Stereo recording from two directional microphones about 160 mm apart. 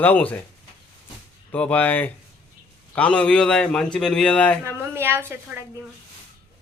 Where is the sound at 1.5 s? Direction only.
10° left (ahead or behind).